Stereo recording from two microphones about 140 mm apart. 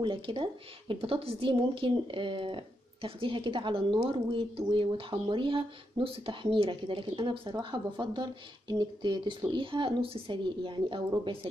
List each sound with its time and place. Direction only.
0.0 s a woman's voice: 35° right (ahead or behind)